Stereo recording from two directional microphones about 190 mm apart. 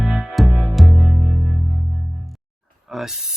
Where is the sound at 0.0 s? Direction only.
Centre (ahead or behind).